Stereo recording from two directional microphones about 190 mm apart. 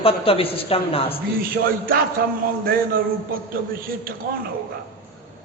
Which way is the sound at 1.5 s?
50° right (ahead or behind).